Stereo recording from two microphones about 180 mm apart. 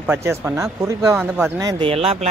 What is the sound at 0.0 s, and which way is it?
Speech, 15° right (ahead or behind).